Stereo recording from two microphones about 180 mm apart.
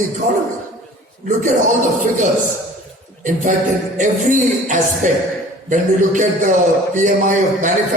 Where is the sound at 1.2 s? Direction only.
45° right (ahead or behind).